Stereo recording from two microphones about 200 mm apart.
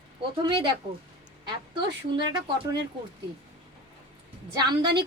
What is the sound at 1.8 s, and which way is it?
Speech, 20° right (ahead or behind).